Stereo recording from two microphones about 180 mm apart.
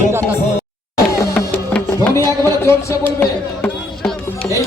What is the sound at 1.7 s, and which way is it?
Music, 5° left (ahead or behind).